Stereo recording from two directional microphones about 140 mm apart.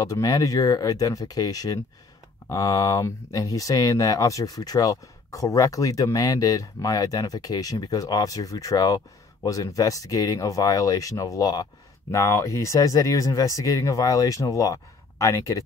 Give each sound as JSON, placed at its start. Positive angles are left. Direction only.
{"t": 0.0, "sound": "speech", "side_deg": 25}